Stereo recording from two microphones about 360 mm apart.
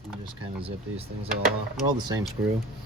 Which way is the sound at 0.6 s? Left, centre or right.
Centre.